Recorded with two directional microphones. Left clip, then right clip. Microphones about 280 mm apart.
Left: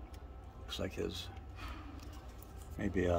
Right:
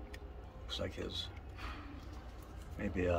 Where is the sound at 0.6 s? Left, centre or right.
Left.